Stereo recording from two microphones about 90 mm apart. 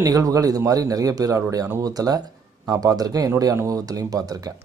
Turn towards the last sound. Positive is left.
turn(degrees=-45)  # may be behind; listen again after turning